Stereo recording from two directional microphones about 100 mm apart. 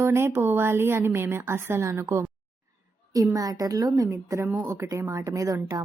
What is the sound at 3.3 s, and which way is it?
A woman's voice, 35° right (ahead or behind).